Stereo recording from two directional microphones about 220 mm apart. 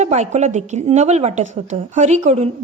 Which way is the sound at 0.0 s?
30° right (ahead or behind).